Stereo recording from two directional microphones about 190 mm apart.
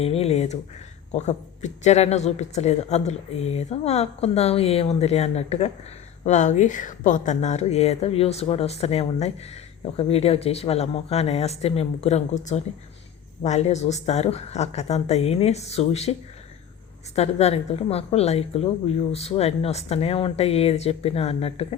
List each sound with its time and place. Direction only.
0.0 s speech: 30° left (ahead or behind)
17.2 s speech: 35° left (ahead or behind)